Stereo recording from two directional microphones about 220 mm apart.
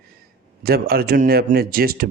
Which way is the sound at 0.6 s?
45° right (ahead or behind).